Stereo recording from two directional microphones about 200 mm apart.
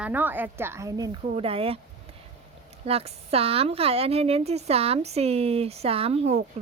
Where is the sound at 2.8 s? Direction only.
30° right (ahead or behind).